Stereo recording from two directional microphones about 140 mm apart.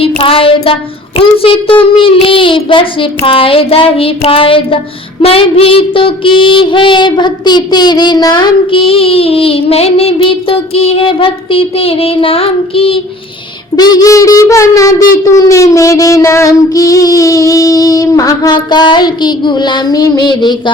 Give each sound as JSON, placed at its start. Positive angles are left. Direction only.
{"t": 0.0, "sound": "child singing", "side_deg": 40}
{"t": 13.7, "sound": "a child's voice", "side_deg": 30}